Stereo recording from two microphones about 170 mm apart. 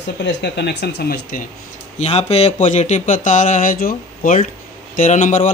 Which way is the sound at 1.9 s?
40° left (ahead or behind).